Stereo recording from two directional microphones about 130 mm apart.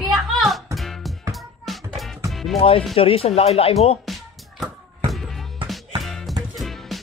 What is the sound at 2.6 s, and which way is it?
Speech, 45° left (ahead or behind).